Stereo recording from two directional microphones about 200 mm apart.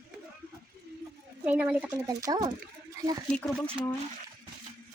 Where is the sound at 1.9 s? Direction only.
20° right (ahead or behind).